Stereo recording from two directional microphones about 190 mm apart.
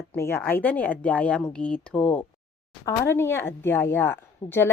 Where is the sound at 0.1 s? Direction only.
15° left (ahead or behind).